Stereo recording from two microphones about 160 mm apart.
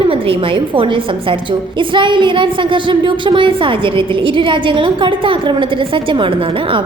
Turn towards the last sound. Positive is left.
turn(degrees=-30)  # may be behind; listen again after turning